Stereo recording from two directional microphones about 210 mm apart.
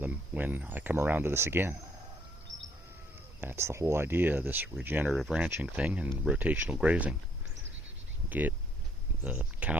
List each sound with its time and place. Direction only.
0.0 s speech: 10° right (ahead or behind)
3.4 s speech: 10° right (ahead or behind)
8.3 s speech: 10° right (ahead or behind)